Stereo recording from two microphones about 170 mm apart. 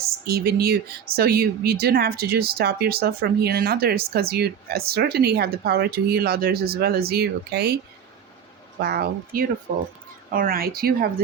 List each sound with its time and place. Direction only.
0.3 s a woman's voice: 65° right (ahead or behind)
8.8 s speech: 65° right (ahead or behind)
9.7 s speech: 40° right (ahead or behind)
10.3 s speech: 60° right (ahead or behind)